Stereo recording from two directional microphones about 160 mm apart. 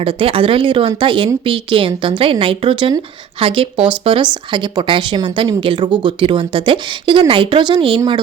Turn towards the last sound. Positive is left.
turn(degrees=-30)  # may be behind; listen again after turning